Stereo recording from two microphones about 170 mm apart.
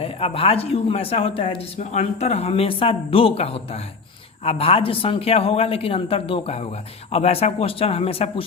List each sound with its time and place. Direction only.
0.0 s a woman's voice: 35° left (ahead or behind)